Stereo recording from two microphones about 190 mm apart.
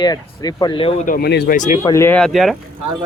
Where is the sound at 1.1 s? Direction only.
55° left (ahead or behind).